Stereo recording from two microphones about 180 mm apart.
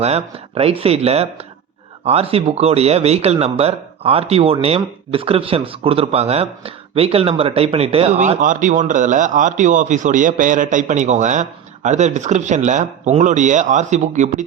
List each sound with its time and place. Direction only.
0.0 s speech: 35° right (ahead or behind)